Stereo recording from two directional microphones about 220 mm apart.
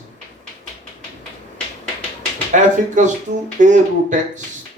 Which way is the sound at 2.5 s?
35° right (ahead or behind).